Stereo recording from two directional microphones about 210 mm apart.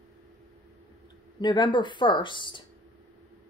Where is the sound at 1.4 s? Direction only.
20° left (ahead or behind).